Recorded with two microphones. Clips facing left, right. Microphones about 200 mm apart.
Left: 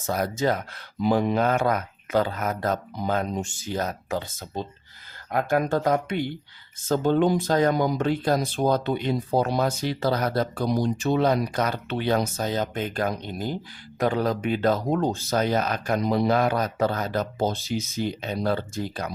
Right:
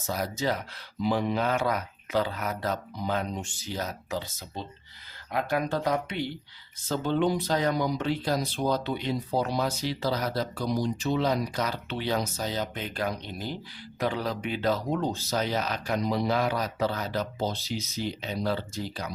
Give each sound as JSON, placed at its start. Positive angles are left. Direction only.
{"t": 0.0, "sound": "speech", "side_deg": 55}